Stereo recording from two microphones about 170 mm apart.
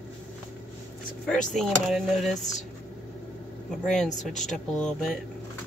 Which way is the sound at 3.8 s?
5° left (ahead or behind).